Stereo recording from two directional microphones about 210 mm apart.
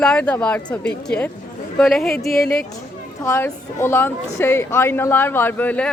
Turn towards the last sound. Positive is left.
turn(degrees=5)  # may be behind; listen again after turning